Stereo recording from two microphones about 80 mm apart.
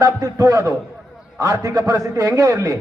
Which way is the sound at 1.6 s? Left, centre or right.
Right.